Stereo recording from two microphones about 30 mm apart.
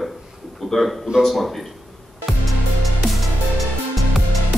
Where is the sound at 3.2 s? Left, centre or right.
Centre.